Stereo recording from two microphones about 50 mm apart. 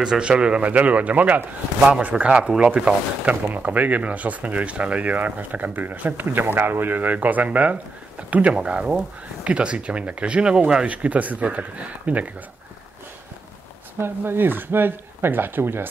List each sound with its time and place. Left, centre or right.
0.0 s speech: centre
2.2 s speech: centre
13.9 s speech: right